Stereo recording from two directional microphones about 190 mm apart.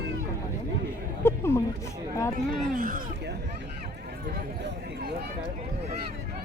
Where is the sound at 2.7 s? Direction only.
45° right (ahead or behind).